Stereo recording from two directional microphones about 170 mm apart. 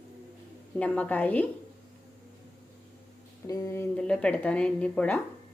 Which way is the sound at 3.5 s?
20° left (ahead or behind).